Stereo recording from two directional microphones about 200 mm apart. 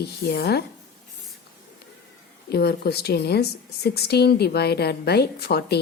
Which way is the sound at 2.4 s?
55° left (ahead or behind).